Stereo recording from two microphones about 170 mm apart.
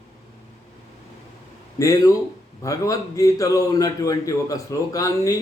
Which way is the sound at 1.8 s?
20° left (ahead or behind).